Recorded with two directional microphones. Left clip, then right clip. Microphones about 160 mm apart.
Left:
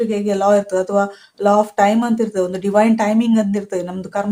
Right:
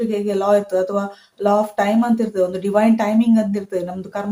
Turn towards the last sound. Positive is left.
turn(degrees=30)  # may be behind; listen again after turning